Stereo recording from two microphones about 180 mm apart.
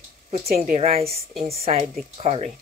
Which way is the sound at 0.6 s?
40° right (ahead or behind).